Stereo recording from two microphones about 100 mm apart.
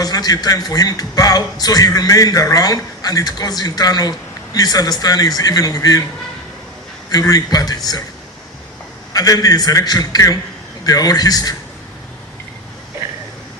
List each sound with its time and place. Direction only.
0.0 s a man's voice: 40° left (ahead or behind)
7.1 s a man's voice: 40° left (ahead or behind)
9.1 s a man's voice: 40° left (ahead or behind)